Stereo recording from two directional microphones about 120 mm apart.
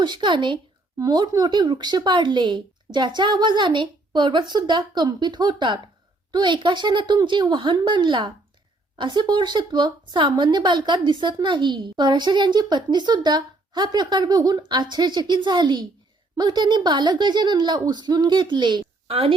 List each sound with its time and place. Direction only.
0.0 s speech: 40° right (ahead or behind)